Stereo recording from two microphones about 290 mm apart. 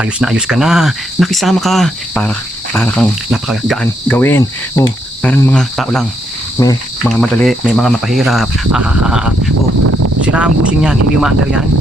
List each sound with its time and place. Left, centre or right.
0.0 s speech: centre
9.8 s a sound: right
10.2 s speech: centre